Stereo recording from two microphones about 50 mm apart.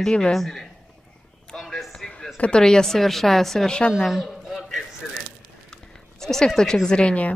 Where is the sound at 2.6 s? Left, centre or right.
Centre.